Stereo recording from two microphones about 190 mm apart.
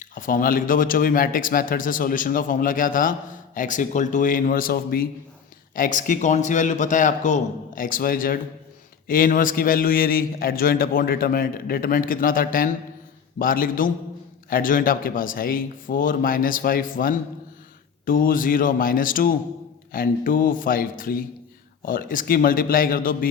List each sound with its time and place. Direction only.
0.0 s a man's voice: 45° left (ahead or behind)